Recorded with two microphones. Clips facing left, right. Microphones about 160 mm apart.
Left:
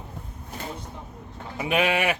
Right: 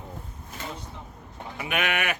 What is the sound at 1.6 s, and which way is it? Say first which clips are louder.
Sheep: left 5 dB; 30° left (ahead or behind).